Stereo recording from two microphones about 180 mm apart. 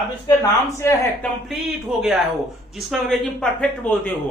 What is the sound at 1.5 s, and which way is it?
Speech, centre (ahead or behind).